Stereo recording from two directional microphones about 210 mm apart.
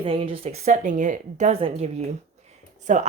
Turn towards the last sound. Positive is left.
turn(degrees=-35)  # may be behind; listen again after turning